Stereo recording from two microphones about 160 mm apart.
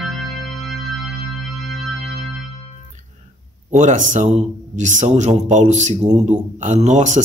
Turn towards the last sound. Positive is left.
turn(degrees=-50)  # may be behind; listen again after turning